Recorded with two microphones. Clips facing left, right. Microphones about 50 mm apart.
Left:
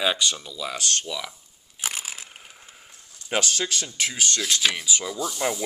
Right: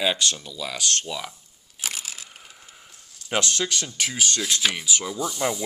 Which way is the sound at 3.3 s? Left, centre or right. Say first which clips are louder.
Right 1 dB; centre.